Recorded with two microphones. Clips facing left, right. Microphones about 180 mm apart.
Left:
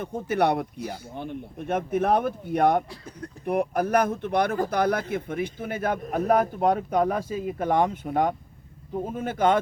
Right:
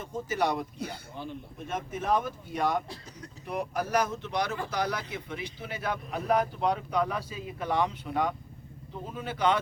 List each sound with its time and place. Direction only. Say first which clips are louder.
0.0 s speech: left 6 dB; 60° left (ahead or behind)